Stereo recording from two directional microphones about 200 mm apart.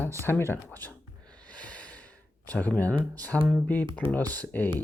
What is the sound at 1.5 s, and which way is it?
Gasp, 5° left (ahead or behind).